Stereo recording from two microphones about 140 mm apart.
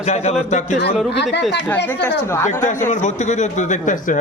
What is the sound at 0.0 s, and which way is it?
Speech, 55° left (ahead or behind).